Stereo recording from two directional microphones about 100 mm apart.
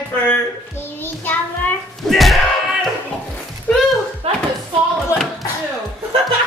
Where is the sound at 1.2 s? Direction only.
20° left (ahead or behind).